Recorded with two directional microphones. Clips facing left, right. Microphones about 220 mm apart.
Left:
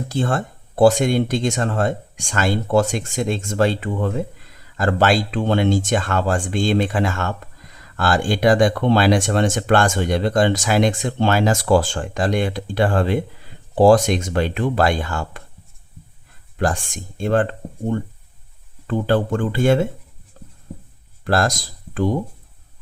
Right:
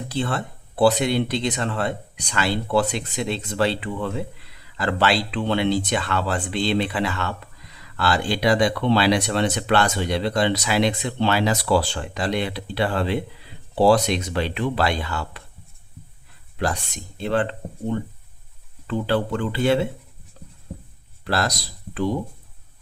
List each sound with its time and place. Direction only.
0.1 s speech: 45° left (ahead or behind)
16.6 s speech: 50° left (ahead or behind)
20.4 s writing: 50° left (ahead or behind)
21.2 s speech: 50° left (ahead or behind)